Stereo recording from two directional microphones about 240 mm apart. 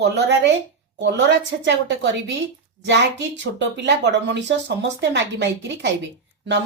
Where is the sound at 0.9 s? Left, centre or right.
Right.